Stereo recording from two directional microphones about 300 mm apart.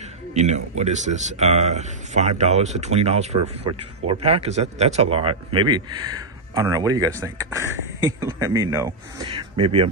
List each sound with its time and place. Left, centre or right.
0.3 s a man's voice: right